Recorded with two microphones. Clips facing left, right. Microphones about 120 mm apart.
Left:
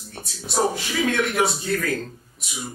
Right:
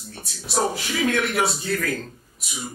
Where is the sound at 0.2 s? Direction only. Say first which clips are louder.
Left 1 dB; centre (ahead or behind).